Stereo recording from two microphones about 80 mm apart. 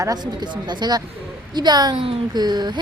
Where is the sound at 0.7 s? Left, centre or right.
Right.